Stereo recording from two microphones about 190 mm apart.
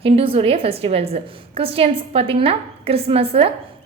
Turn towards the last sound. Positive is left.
turn(degrees=-30)  # may be behind; listen again after turning